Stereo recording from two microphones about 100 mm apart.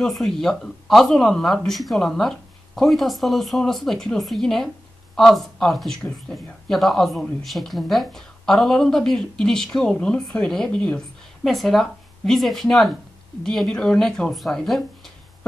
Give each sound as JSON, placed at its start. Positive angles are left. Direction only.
{"t": 0.0, "sound": "speech", "side_deg": 0}